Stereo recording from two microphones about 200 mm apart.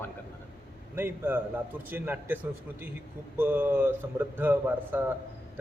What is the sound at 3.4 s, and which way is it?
A man's voice, 10° right (ahead or behind).